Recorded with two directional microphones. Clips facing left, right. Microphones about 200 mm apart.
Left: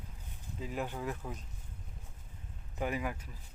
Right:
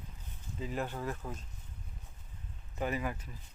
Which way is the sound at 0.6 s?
10° left (ahead or behind).